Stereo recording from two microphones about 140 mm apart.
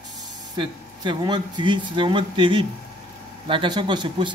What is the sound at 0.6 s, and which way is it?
Speech, 35° right (ahead or behind).